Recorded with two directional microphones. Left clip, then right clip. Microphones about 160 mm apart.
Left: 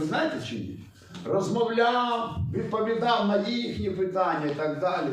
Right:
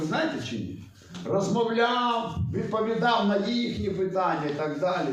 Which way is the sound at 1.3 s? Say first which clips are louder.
Even; 15° left (ahead or behind).